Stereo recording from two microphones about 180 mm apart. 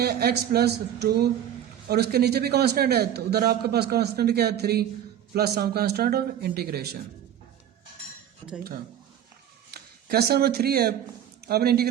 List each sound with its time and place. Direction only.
0.0 s a man's voice: 60° right (ahead or behind)
9.7 s a man's voice: 60° right (ahead or behind)